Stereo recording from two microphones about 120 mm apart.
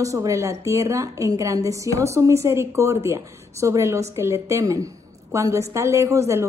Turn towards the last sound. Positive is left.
turn(degrees=-25)  # may be behind; listen again after turning